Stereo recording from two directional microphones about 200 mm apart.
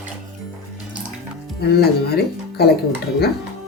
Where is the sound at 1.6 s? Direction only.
50° left (ahead or behind).